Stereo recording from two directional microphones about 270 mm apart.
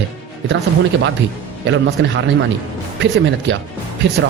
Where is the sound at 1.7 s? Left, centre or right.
Right.